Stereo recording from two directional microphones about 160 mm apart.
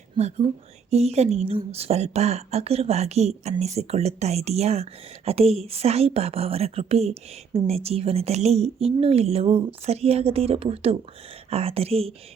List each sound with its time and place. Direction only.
0.2 s speech: 45° right (ahead or behind)